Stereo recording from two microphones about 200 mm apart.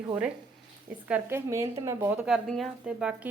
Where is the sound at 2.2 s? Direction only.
5° right (ahead or behind).